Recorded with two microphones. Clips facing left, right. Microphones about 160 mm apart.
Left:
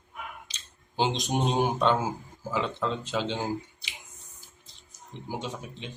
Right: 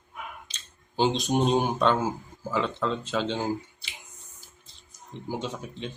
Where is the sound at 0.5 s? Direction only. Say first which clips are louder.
Right 1 dB; 15° left (ahead or behind).